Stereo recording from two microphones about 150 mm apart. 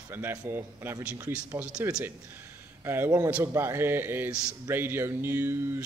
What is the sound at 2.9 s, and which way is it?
A man's voice, 15° right (ahead or behind).